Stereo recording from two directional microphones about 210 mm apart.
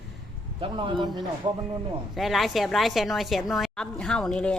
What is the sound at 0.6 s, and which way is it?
Speech, 25° right (ahead or behind).